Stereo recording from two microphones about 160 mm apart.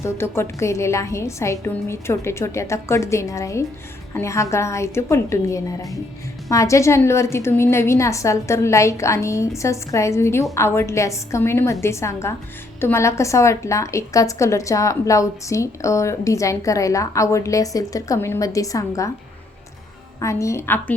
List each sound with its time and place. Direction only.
0.0 s a woman's voice: 15° left (ahead or behind)
20.1 s a woman's voice: 20° left (ahead or behind)